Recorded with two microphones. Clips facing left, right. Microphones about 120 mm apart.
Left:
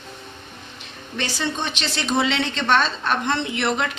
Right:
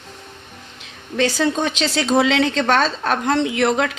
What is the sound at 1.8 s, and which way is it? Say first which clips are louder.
Speech: right 4 dB; 90° right.